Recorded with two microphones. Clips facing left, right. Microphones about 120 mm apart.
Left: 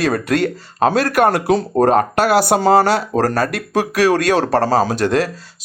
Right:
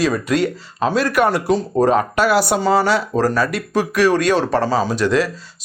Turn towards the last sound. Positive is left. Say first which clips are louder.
# even
turn(degrees=55)  # may be behind; listen again after turning